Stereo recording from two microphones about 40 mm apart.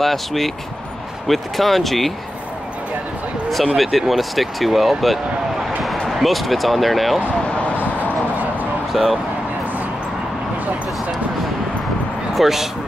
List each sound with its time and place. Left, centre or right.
0.0 s speech: centre
3.7 s speech: centre
7.4 s a sound: left
8.9 s speech: centre
12.4 s speech: centre